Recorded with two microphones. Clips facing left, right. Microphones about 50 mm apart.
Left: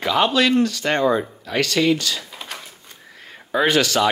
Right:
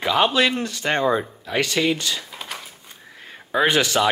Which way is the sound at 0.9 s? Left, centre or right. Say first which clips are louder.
Even; centre.